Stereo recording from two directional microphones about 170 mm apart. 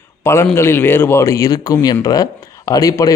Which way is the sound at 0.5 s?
15° left (ahead or behind).